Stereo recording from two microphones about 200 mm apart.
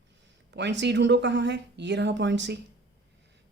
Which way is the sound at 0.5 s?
60° right (ahead or behind).